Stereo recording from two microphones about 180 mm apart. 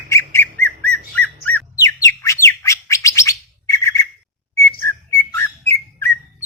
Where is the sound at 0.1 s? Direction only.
15° left (ahead or behind).